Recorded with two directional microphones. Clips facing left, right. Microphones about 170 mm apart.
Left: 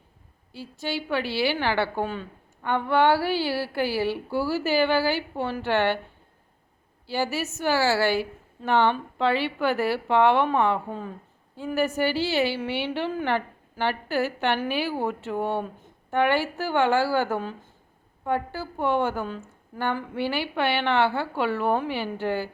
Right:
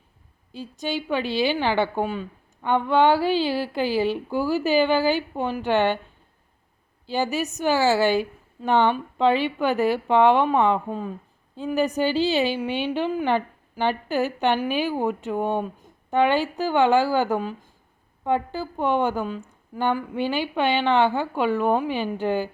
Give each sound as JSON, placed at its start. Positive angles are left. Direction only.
{"t": 0.5, "sound": "a woman's voice", "side_deg": -15}
{"t": 7.1, "sound": "a woman's voice", "side_deg": -20}